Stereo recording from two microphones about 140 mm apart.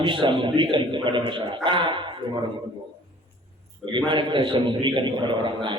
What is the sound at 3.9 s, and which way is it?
A man's voice, 35° right (ahead or behind).